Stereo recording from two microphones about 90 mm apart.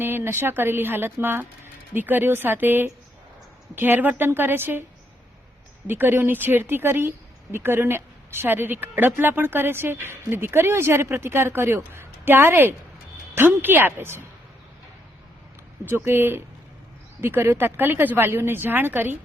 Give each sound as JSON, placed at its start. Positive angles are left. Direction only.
{"t": 0.0, "sound": "speech", "side_deg": -25}
{"t": 5.9, "sound": "speech", "side_deg": -25}
{"t": 15.9, "sound": "speech", "side_deg": -25}